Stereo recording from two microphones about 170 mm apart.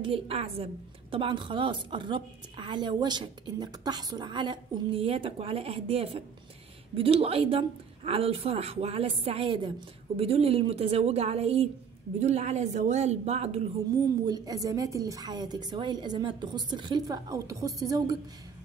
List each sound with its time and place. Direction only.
0.0 s a woman's voice: 35° right (ahead or behind)
14.2 s a woman's voice: 20° right (ahead or behind)